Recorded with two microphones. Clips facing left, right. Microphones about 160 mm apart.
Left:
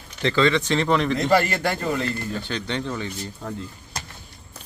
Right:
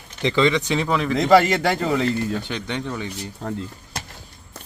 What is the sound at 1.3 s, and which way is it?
Speech, 90° right.